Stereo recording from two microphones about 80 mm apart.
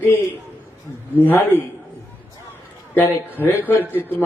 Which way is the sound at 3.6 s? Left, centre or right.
Left.